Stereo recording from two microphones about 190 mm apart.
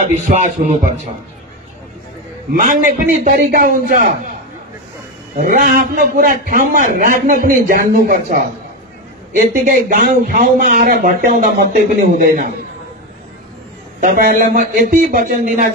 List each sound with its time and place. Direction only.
0.3 s speech: 40° right (ahead or behind)
2.5 s a man's voice: 45° right (ahead or behind)
5.4 s a man's voice: 50° right (ahead or behind)
14.0 s a man's voice: 45° right (ahead or behind)